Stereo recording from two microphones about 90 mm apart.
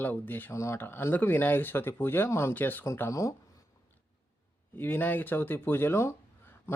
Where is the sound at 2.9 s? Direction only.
30° left (ahead or behind).